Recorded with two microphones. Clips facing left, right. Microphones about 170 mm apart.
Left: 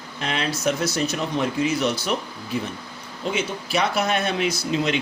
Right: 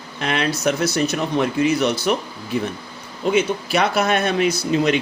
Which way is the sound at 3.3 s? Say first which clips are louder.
Right 6 dB; 65° right (ahead or behind).